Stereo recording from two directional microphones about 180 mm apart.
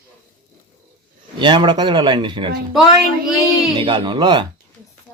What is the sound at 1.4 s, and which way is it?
Speech, 25° right (ahead or behind).